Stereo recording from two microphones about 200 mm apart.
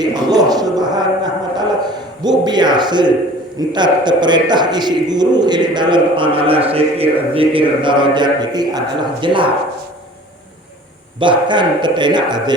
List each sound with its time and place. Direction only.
0.0 s a sound: 20° right (ahead or behind)
2.4 s a man's voice: 20° right (ahead or behind)
11.2 s a man's voice: 25° right (ahead or behind)